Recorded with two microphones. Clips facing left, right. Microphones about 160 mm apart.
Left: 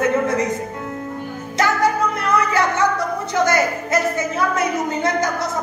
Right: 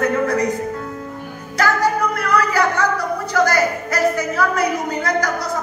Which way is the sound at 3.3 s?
20° left (ahead or behind).